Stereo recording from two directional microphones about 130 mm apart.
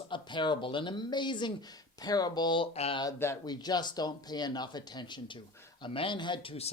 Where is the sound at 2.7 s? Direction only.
50° left (ahead or behind).